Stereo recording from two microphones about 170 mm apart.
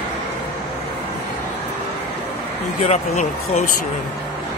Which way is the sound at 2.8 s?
40° left (ahead or behind).